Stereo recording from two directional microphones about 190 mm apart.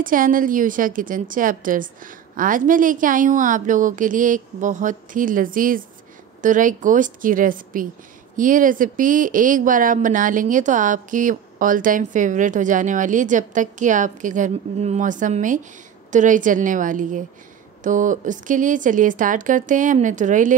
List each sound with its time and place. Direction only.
0.0 s a woman's voice: 45° right (ahead or behind)